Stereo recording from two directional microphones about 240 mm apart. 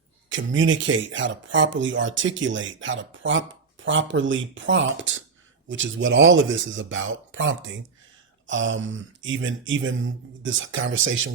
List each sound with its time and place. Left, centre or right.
0.3 s speech: right